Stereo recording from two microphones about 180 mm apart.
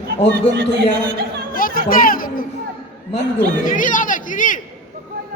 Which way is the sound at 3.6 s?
45° left (ahead or behind).